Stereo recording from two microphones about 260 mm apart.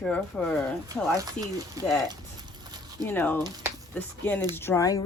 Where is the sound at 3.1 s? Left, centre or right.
Centre.